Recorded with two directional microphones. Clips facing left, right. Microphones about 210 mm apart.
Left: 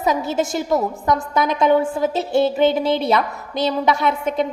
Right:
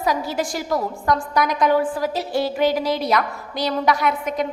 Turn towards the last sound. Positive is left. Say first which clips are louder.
# left 2 dB
turn(degrees=25)  # may be behind; listen again after turning